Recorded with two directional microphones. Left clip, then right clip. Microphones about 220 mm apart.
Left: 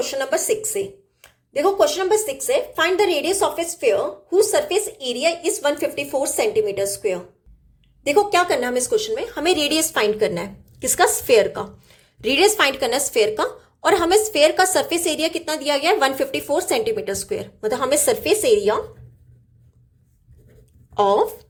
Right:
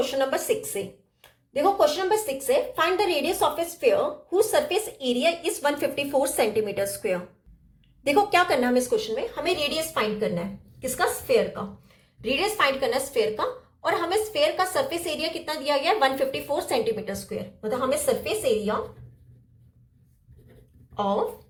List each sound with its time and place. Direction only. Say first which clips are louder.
0.0 s a woman's voice: left 3 dB; 20° left (ahead or behind)
9.3 s a woman's voice: left 8 dB; 45° left (ahead or behind)
20.9 s speech: left 9 dB; 45° left (ahead or behind)